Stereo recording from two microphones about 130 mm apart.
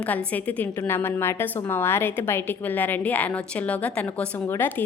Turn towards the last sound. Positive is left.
turn(degrees=15)  # may be behind; listen again after turning